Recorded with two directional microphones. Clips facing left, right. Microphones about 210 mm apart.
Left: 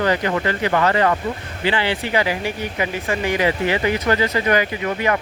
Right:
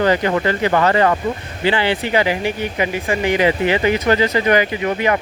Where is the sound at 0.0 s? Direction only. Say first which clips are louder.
Right 3 dB; 30° right (ahead or behind).